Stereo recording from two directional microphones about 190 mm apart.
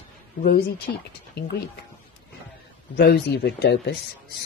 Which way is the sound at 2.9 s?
55° left (ahead or behind).